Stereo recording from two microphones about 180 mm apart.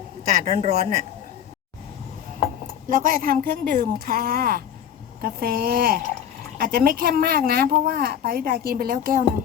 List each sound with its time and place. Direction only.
0.4 s speech: 40° right (ahead or behind)
2.9 s speech: 50° right (ahead or behind)